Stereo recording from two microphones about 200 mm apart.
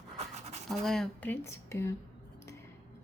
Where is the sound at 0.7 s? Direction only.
Centre (ahead or behind).